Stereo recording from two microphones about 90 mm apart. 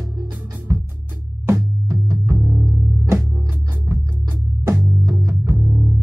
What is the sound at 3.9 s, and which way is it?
Music, 35° right (ahead or behind).